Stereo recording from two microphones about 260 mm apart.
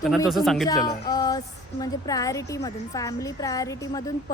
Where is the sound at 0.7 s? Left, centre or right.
Centre.